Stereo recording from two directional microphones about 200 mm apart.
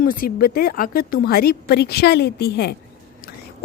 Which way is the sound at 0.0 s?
45° left (ahead or behind).